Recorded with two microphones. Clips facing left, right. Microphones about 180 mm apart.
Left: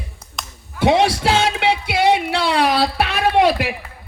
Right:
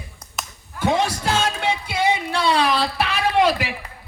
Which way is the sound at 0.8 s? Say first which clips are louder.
Left 5 dB; 75° left (ahead or behind).